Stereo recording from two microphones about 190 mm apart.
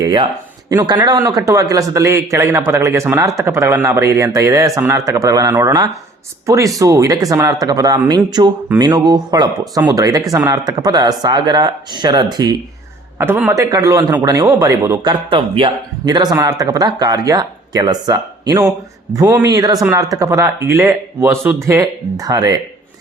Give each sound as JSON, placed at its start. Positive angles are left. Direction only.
{"t": 0.0, "sound": "a man's voice", "side_deg": -20}